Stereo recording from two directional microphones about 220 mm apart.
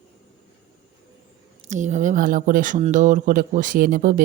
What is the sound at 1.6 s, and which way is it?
Speech, 30° right (ahead or behind).